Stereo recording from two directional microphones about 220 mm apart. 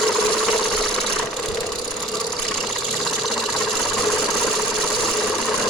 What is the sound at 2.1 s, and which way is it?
Ratchet, 20° left (ahead or behind).